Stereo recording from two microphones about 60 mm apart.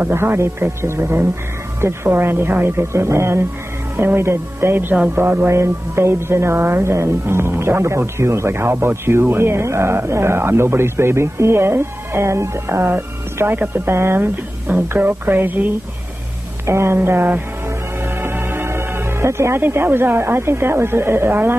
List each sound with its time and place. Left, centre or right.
0.0 s a woman's voice: right
5.5 s a woman's voice: right
16.6 s speech: right
17.6 s music: right
19.6 s a woman's voice: right